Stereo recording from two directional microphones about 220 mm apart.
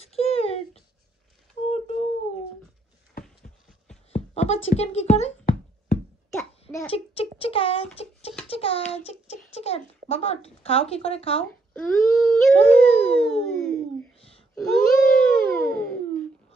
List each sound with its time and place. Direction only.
0.0 s a sound: 25° left (ahead or behind)
4.1 s a sound: 30° left (ahead or behind)
4.6 s music: 30° left (ahead or behind)
6.9 s a child's voice: 25° left (ahead or behind)
11.7 s speech: 5° left (ahead or behind)
14.5 s wail: centre (ahead or behind)